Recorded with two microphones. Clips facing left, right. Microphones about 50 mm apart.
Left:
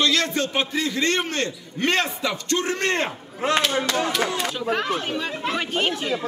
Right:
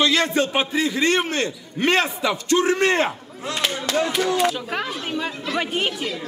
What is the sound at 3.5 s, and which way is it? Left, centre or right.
Speech, left.